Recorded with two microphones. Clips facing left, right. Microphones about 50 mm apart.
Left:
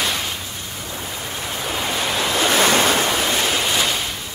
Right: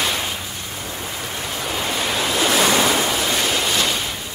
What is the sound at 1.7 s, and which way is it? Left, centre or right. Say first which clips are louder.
Waves: even; centre.